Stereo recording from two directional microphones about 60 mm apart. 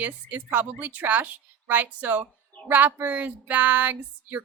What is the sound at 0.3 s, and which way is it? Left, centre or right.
A woman's voice, right.